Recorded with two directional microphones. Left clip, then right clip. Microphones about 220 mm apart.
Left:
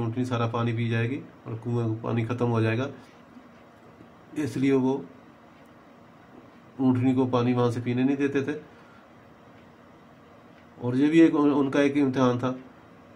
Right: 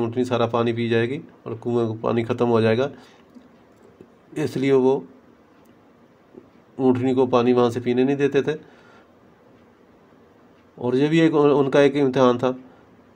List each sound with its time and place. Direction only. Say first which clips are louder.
0.0 s speech: right 8 dB; 45° right (ahead or behind)
4.4 s speech: right 6 dB; 45° right (ahead or behind)
6.8 s speech: right 6 dB; 40° right (ahead or behind)
10.8 s speech: right 2 dB; 45° right (ahead or behind)